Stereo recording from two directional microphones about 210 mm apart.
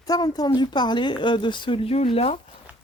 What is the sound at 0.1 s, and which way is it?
Speech, 20° left (ahead or behind).